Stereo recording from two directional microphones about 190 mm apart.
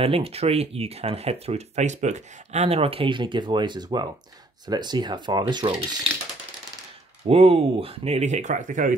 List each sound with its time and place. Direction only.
0.0 s speech: 30° right (ahead or behind)
7.2 s speech: 30° right (ahead or behind)